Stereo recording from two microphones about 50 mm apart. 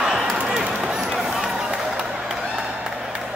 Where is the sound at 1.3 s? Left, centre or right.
Centre.